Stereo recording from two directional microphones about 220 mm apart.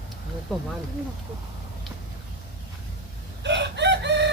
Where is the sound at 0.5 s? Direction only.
Centre (ahead or behind).